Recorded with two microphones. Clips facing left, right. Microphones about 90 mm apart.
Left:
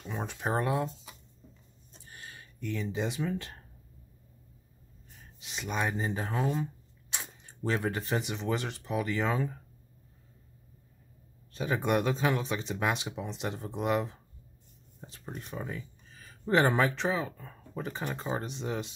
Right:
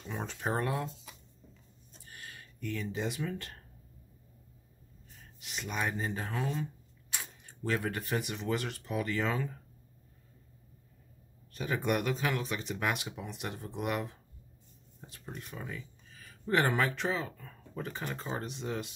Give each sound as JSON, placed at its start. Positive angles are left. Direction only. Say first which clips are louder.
{"t": 0.0, "sound": "speech", "louder": "left 2 dB", "side_deg": 10}
{"t": 5.4, "sound": "speech", "louder": "left 3 dB", "side_deg": 20}
{"t": 11.5, "sound": "speech", "louder": "left 3 dB", "side_deg": 20}